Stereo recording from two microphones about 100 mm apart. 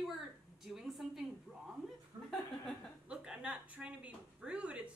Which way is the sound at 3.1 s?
10° right (ahead or behind).